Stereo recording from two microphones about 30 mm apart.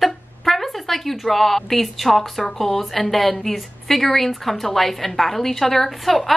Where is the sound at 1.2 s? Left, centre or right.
Centre.